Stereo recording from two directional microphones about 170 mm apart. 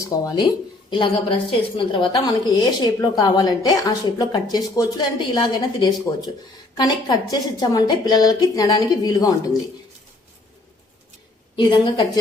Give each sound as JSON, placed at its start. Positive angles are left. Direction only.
{"t": 0.0, "sound": "a woman's voice", "side_deg": 20}
{"t": 11.5, "sound": "a woman's voice", "side_deg": 25}